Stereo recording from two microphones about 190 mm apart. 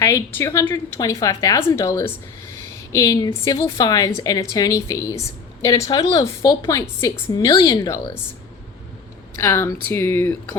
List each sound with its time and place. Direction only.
0.0 s a woman's voice: 15° left (ahead or behind)
9.3 s a woman's voice: 15° left (ahead or behind)